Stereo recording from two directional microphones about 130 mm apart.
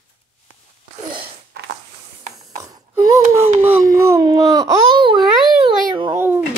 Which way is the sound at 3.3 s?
20° right (ahead or behind).